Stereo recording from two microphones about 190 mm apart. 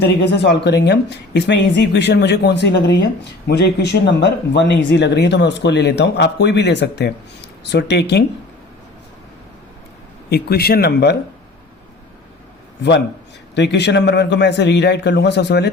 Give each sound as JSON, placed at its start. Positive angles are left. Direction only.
{"t": 0.0, "sound": "speech", "side_deg": 60}
{"t": 10.2, "sound": "speech", "side_deg": 55}
{"t": 13.6, "sound": "speech", "side_deg": 65}